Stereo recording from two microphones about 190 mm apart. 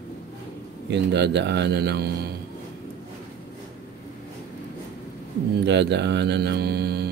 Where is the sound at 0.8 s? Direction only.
65° right (ahead or behind).